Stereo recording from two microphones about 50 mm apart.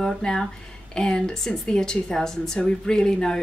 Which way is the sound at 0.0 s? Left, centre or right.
Centre.